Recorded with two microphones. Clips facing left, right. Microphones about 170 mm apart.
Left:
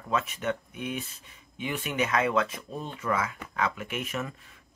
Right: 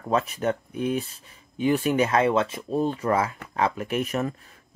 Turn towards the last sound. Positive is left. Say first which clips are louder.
# right 7 dB
turn(degrees=-40)  # may be behind; listen again after turning